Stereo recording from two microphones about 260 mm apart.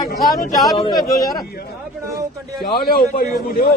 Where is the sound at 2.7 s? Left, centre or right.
Left.